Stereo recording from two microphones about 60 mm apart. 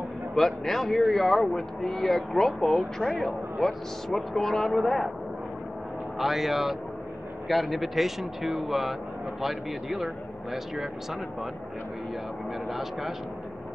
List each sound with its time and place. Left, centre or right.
0.4 s speech: centre
6.1 s speech: centre
12.6 s speech: centre